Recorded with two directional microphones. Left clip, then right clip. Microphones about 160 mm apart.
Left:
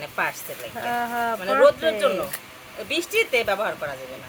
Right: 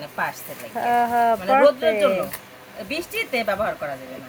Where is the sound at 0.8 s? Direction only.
10° right (ahead or behind).